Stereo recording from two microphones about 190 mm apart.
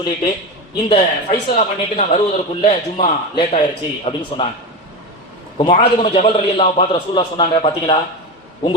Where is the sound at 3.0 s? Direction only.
30° left (ahead or behind).